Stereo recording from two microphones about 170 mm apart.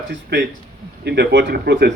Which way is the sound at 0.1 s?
90° right.